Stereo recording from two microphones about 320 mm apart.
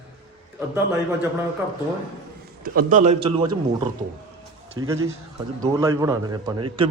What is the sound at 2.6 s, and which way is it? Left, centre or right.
Speech, right.